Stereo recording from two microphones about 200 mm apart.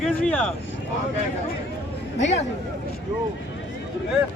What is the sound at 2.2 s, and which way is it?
Speech, 35° left (ahead or behind).